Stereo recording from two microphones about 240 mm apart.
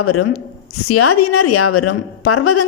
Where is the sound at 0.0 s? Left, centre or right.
Left.